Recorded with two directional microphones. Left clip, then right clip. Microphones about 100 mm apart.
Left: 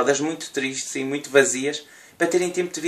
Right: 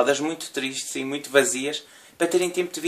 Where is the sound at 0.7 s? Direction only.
80° right.